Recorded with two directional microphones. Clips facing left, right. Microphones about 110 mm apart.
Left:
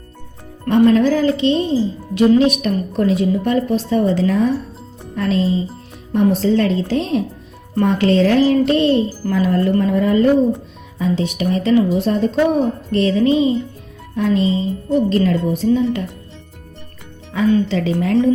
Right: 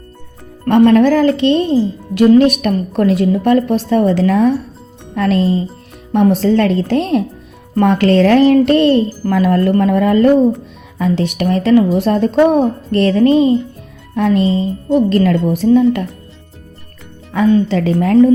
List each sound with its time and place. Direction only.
0.7 s a woman's voice: 65° right (ahead or behind)
6.1 s a woman's voice: 65° right (ahead or behind)
10.9 s a woman's voice: 70° right (ahead or behind); by 16.0 s 55° right (ahead or behind)
17.3 s a woman's voice: 45° right (ahead or behind)